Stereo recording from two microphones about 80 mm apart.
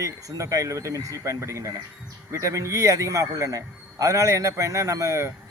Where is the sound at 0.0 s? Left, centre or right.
Right.